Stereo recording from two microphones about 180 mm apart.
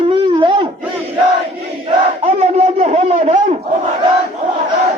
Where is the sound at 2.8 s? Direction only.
35° right (ahead or behind).